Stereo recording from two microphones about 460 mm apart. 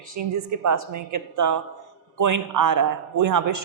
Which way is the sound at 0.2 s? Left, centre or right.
Right.